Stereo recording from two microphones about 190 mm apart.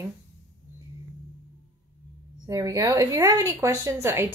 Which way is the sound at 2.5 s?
15° right (ahead or behind).